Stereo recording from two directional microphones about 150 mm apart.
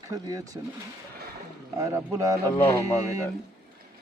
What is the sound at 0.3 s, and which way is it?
Speech, 25° right (ahead or behind).